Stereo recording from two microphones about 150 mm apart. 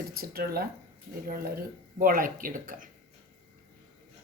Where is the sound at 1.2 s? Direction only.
80° right.